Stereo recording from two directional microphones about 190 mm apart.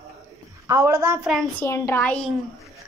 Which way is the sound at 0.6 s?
15° right (ahead or behind).